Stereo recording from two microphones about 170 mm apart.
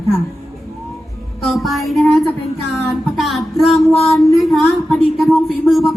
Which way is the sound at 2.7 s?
Centre (ahead or behind).